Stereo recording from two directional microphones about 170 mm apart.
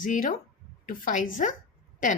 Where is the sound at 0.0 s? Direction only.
50° left (ahead or behind).